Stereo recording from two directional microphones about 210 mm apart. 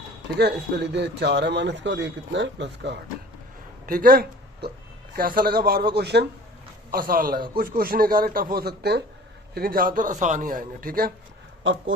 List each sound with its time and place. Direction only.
0.3 s a man's voice: 50° right (ahead or behind)
3.8 s a man's voice: 40° right (ahead or behind)
11.6 s a man's voice: 65° right (ahead or behind)